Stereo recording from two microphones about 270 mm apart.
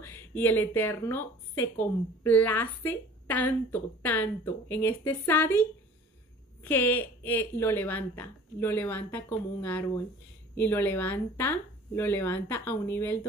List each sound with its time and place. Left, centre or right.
0.0 s speech: centre